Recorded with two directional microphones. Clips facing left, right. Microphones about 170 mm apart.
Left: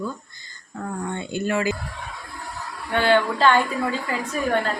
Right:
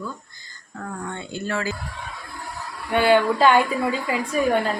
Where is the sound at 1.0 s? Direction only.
15° left (ahead or behind).